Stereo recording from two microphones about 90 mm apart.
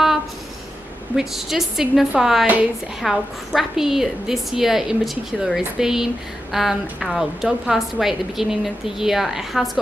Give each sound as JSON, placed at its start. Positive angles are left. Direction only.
{"t": 1.1, "sound": "a woman's voice", "side_deg": -5}